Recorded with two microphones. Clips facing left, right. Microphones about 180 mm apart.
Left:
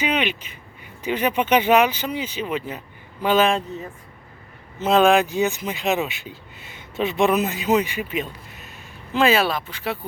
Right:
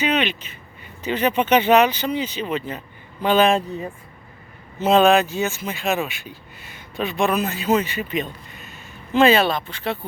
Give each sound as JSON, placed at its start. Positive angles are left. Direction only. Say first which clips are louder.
{"t": 0.0, "sound": "speech", "louder": "right 2 dB", "side_deg": 10}
{"t": 4.9, "sound": "speech", "louder": "even", "side_deg": 10}